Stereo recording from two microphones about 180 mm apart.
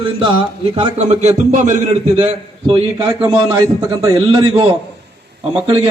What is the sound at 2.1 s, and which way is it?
Music, 30° right (ahead or behind).